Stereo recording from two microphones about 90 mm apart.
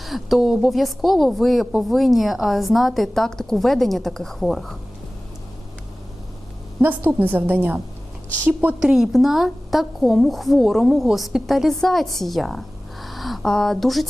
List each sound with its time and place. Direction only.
0.0 s a woman's voice: centre (ahead or behind)
6.8 s a woman's voice: 20° right (ahead or behind)
8.8 s a woman's voice: 5° right (ahead or behind)